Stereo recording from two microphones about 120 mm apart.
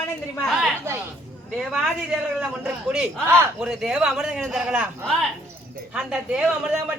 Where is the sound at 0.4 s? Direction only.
Centre (ahead or behind).